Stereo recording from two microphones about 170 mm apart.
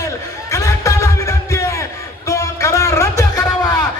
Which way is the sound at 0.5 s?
15° left (ahead or behind).